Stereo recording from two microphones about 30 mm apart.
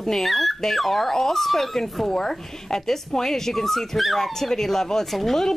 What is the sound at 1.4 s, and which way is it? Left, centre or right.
Speech, centre.